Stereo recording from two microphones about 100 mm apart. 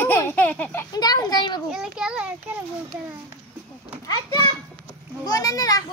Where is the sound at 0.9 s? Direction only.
40° left (ahead or behind).